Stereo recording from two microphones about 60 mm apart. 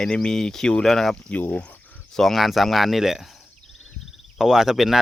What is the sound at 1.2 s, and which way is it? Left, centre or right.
Speech, left.